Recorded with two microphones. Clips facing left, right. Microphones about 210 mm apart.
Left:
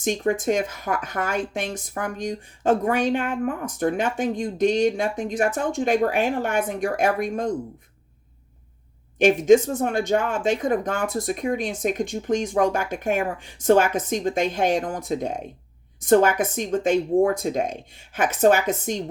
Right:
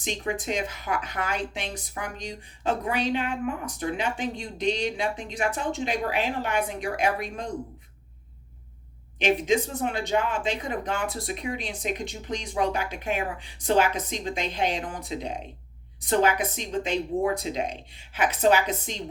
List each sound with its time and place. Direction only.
0.0 s speech: 50° left (ahead or behind)
9.1 s speech: 50° left (ahead or behind)